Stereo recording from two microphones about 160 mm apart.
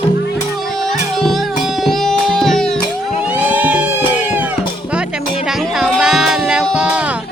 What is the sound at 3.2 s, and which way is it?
Music, 10° right (ahead or behind).